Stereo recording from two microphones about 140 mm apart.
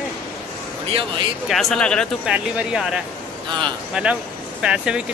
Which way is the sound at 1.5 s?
Centre (ahead or behind).